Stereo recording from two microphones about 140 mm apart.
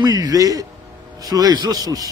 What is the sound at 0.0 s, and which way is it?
A man's voice, 30° right (ahead or behind).